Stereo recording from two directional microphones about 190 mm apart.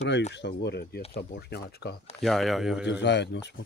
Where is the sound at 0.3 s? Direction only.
60° left (ahead or behind).